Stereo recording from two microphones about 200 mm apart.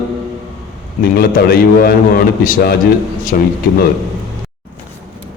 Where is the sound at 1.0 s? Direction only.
50° left (ahead or behind).